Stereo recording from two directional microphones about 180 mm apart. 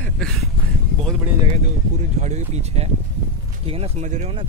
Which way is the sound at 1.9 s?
40° right (ahead or behind).